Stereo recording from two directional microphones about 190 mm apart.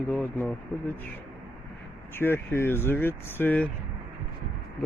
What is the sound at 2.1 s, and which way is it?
Speech, 10° left (ahead or behind).